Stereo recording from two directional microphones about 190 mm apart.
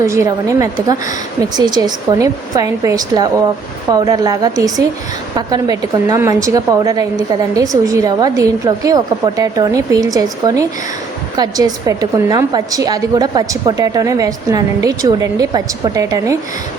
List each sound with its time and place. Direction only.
0.0 s a woman's voice: 15° right (ahead or behind)